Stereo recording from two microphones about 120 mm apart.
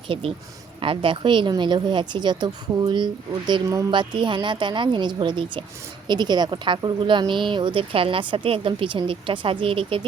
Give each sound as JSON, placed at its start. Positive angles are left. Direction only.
{"t": 0.1, "sound": "a woman's voice", "side_deg": -50}